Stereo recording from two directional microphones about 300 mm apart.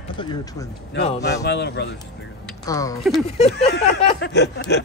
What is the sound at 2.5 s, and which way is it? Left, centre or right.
Speech, centre.